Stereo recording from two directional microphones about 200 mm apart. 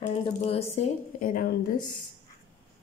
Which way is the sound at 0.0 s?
30° left (ahead or behind).